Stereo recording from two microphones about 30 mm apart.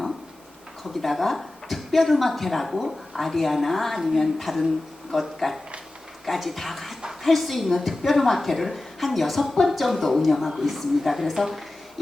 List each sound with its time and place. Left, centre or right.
1.0 s a woman's voice: centre